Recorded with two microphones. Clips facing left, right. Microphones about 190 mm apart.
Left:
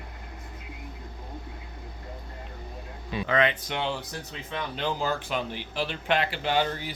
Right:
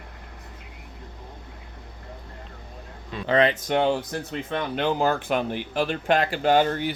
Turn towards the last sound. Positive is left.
turn(degrees=-55)  # may be behind; listen again after turning